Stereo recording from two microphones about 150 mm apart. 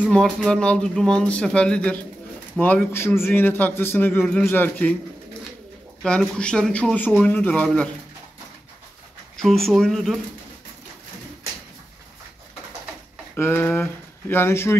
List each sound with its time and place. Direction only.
0.0 s speech: 5° left (ahead or behind)
6.0 s speech: 5° left (ahead or behind)
9.4 s speech: centre (ahead or behind)
13.4 s speech: 15° left (ahead or behind)